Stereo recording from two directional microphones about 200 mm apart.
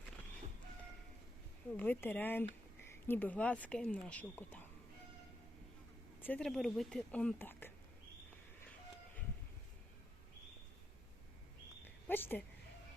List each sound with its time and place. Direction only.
1.7 s speech: 10° left (ahead or behind)
6.2 s speech: 5° left (ahead or behind)
12.0 s speech: 10° left (ahead or behind)